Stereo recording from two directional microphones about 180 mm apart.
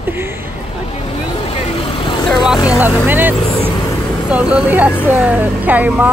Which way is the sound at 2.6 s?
10° right (ahead or behind).